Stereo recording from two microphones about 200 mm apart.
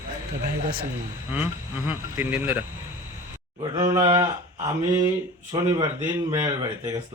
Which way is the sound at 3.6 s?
15° right (ahead or behind).